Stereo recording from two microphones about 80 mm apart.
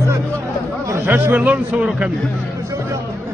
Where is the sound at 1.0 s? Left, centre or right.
Right.